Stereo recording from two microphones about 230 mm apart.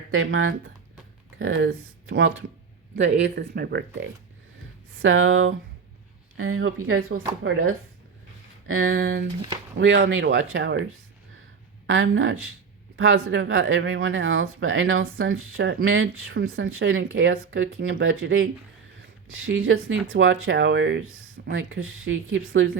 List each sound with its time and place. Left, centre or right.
0.1 s speech: right
2.9 s speech: right
5.0 s speech: right
8.6 s speech: right
11.9 s speech: right
15.5 s speech: right